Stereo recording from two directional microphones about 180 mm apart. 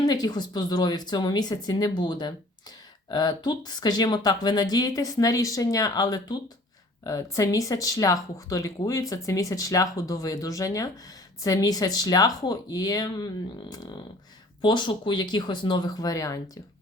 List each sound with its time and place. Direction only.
0.0 s speech: 20° left (ahead or behind)